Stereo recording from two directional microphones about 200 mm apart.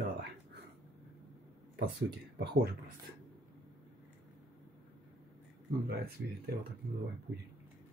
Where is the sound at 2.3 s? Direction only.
55° right (ahead or behind).